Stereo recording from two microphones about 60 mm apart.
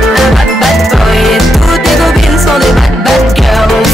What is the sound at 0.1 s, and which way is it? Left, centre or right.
Music, centre.